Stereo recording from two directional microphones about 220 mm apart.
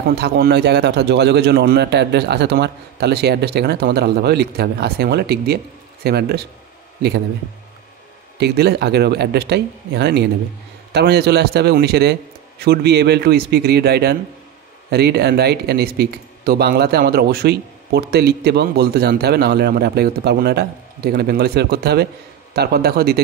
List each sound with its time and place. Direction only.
0.1 s speech: 50° right (ahead or behind)
8.4 s speech: 50° right (ahead or behind)